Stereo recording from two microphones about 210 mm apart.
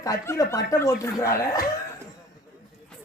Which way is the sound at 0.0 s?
15° left (ahead or behind).